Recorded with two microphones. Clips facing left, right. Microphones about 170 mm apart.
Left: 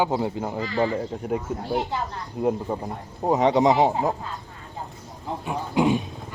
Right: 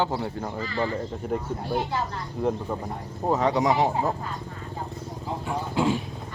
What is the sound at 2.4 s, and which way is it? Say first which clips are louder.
Speech: left 3 dB; 15° left (ahead or behind).